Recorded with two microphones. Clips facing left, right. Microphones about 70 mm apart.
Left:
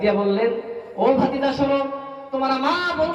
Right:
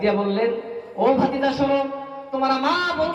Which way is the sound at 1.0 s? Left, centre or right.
Centre.